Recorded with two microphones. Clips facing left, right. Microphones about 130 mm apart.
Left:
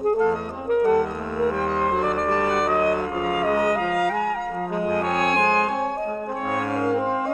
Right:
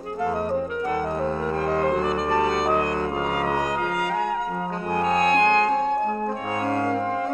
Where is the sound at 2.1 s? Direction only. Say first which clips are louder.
Even; 50° left (ahead or behind).